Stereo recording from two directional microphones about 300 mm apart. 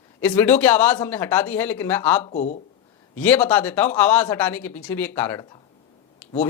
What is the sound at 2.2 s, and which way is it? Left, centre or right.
Speech, left.